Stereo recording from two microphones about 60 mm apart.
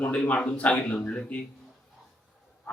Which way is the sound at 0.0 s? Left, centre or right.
Left.